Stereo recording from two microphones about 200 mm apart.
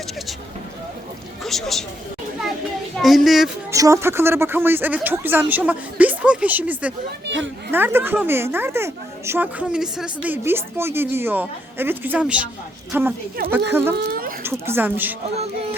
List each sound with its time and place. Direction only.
1.5 s speech: centre (ahead or behind)
3.0 s speech: centre (ahead or behind)
3.7 s speech: 15° right (ahead or behind)
7.3 s speech: 65° right (ahead or behind)
7.7 s speech: 10° right (ahead or behind)
14.1 s a sound: 45° right (ahead or behind)
14.4 s speech: 10° right (ahead or behind)